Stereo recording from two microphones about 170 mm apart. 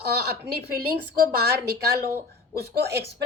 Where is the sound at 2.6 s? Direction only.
70° right (ahead or behind).